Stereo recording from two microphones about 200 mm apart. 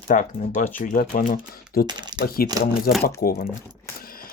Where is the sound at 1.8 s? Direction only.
20° right (ahead or behind).